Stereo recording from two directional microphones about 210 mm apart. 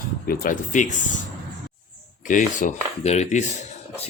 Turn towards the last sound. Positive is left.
turn(degrees=35)  # may be behind; listen again after turning